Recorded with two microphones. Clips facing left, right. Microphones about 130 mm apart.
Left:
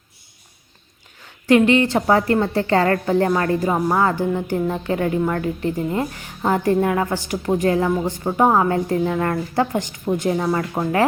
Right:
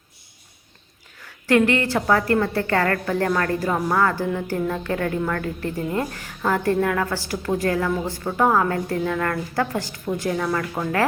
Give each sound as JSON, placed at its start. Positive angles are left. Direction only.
{"t": 1.2, "sound": "a woman's voice", "side_deg": 20}